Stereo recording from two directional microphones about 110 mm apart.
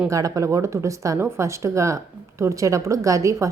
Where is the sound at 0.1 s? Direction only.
30° right (ahead or behind).